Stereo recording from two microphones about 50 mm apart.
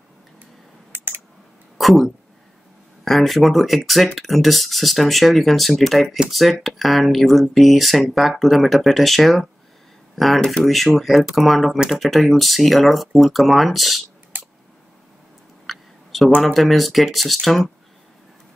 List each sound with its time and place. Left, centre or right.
0.9 s typing: right
1.8 s speech: centre
15.6 s a sound: centre
16.5 s speech: centre